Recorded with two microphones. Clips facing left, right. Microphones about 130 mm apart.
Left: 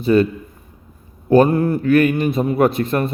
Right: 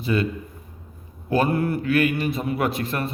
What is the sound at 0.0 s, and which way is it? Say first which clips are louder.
Speech: left 9 dB; 40° left (ahead or behind).